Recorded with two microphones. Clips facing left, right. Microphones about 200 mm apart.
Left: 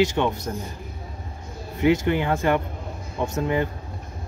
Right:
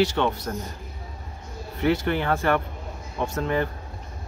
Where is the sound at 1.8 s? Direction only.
15° left (ahead or behind).